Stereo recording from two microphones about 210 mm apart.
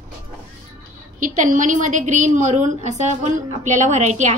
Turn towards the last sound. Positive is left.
turn(degrees=-35)  # may be behind; listen again after turning